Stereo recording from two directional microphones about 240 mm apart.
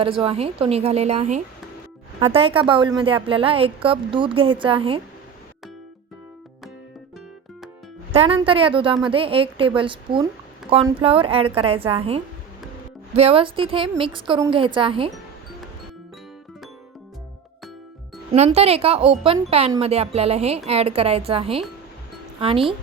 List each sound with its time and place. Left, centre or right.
0.0 s a woman's voice: right
8.1 s a woman's voice: right
18.3 s a woman's voice: right